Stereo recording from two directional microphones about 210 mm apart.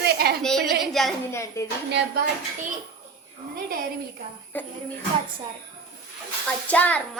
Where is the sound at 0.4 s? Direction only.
Centre (ahead or behind).